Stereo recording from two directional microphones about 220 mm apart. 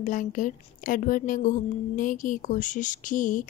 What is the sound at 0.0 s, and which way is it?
Speech, 35° left (ahead or behind).